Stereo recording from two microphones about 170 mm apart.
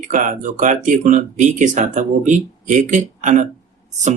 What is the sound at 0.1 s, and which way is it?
Speech, 50° right (ahead or behind).